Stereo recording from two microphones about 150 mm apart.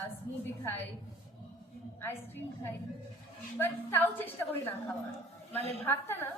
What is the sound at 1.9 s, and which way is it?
Speech, 15° left (ahead or behind).